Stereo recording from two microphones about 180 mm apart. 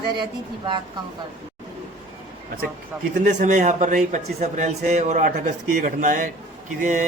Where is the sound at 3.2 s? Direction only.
45° right (ahead or behind).